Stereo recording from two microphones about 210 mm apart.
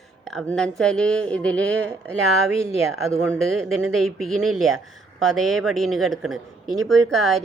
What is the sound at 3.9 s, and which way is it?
Speech, centre (ahead or behind).